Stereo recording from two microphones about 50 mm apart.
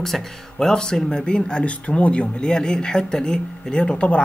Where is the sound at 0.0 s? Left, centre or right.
Centre.